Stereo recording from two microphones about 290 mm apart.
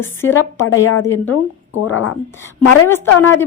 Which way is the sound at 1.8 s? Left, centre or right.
Left.